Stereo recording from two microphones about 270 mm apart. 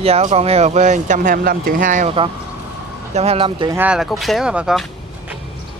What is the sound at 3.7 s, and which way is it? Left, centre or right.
Speech, centre.